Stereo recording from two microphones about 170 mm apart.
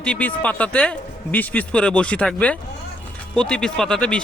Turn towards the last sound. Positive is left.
turn(degrees=5)  # may be behind; listen again after turning